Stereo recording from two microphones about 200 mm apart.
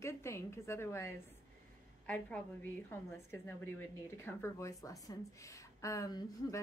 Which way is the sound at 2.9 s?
10° left (ahead or behind).